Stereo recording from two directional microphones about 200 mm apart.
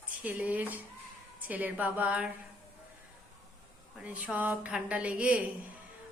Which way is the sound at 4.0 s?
5° right (ahead or behind).